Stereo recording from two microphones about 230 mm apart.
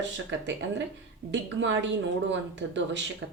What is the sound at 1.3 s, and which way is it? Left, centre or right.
Speech, right.